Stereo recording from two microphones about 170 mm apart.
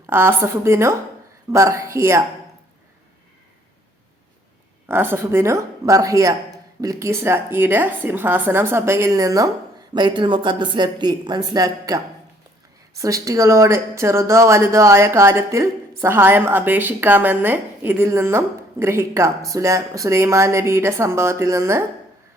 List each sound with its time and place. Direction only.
0.1 s speech: 15° right (ahead or behind)
4.9 s speech: 10° right (ahead or behind)
13.0 s speech: 20° right (ahead or behind)